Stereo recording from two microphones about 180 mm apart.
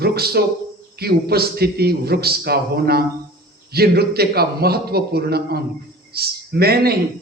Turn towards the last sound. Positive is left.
turn(degrees=-60)  # may be behind; listen again after turning